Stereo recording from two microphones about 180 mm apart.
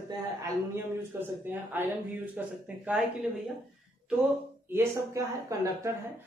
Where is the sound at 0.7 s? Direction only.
10° right (ahead or behind).